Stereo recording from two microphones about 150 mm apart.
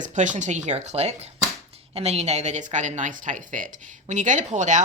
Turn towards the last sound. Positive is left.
turn(degrees=-55)  # may be behind; listen again after turning